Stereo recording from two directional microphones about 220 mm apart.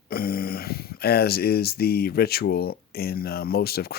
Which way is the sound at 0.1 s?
45° left (ahead or behind).